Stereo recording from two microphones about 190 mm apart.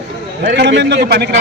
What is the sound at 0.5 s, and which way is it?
Speech, 65° right (ahead or behind).